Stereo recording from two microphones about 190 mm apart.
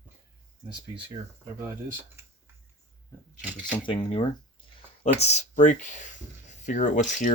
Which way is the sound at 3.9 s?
30° left (ahead or behind).